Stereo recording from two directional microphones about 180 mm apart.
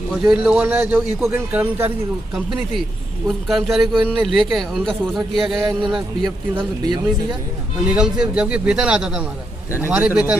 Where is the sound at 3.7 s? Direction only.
Centre (ahead or behind).